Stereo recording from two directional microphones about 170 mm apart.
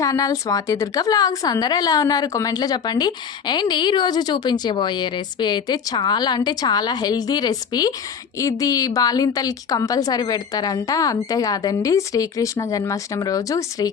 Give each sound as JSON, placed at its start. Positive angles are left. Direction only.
{"t": 0.0, "sound": "a woman's voice", "side_deg": 20}